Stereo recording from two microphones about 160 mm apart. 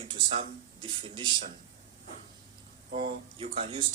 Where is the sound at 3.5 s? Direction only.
35° right (ahead or behind).